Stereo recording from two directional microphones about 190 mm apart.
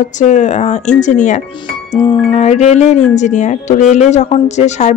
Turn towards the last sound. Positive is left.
turn(degrees=35)  # may be behind; listen again after turning